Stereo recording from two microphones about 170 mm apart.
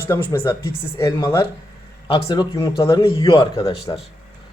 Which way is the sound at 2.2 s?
30° left (ahead or behind).